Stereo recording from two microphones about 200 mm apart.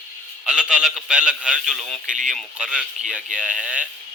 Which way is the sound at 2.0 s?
40° right (ahead or behind).